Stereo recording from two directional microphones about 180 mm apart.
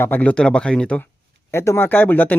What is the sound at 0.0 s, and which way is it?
Speech, 10° left (ahead or behind).